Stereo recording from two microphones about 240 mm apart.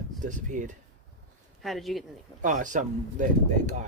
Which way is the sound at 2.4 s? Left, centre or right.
Right.